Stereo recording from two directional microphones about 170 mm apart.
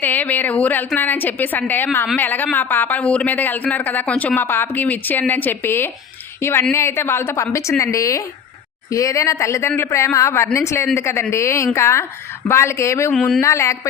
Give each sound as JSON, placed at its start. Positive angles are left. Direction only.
{"t": 0.0, "sound": "speech", "side_deg": 10}
{"t": 13.1, "sound": "speech", "side_deg": 5}
{"t": 13.4, "sound": "speech", "side_deg": 15}